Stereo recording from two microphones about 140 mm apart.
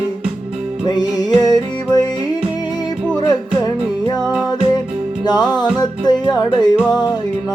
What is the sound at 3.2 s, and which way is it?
Music, 30° left (ahead or behind).